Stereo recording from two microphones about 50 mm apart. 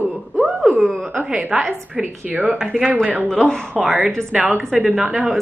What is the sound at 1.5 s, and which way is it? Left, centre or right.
Speech, centre.